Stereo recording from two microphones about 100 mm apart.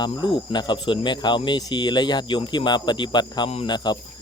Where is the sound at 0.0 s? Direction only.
50° left (ahead or behind).